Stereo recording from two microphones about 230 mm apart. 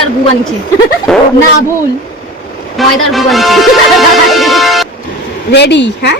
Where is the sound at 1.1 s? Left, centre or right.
Centre.